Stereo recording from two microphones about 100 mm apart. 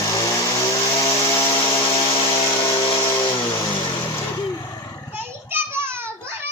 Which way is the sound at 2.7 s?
35° left (ahead or behind).